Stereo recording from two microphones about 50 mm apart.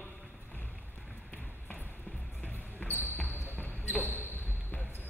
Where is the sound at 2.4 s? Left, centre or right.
Left.